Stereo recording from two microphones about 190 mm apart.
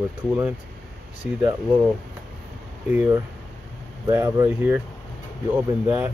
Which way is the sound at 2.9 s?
10° right (ahead or behind).